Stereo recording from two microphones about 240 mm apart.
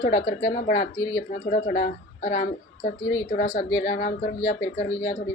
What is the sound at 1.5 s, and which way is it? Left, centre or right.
Speech, left.